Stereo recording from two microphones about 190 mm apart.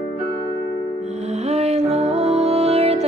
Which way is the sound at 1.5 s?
35° right (ahead or behind).